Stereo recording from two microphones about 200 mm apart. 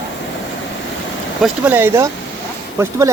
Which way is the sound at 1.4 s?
10° right (ahead or behind).